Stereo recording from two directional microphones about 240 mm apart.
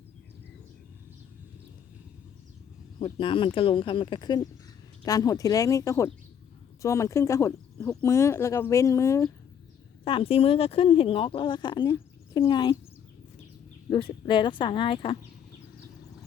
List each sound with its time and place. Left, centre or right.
3.0 s speech: left
13.9 s speech: centre